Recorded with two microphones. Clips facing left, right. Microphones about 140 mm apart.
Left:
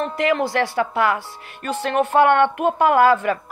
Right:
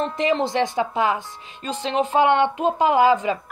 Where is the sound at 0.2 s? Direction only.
20° right (ahead or behind).